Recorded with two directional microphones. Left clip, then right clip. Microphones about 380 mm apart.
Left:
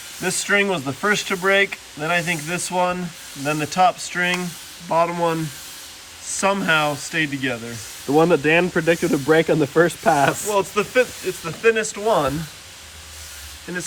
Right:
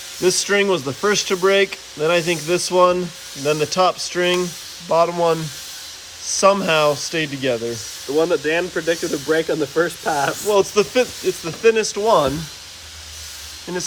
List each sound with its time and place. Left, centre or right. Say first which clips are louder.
0.2 s speech: right 2 dB; centre
8.2 s speech: left 2 dB; centre
10.4 s speech: right 4 dB; centre